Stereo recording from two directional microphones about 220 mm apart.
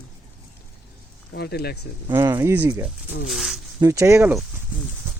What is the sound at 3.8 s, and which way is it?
Speech, 15° right (ahead or behind).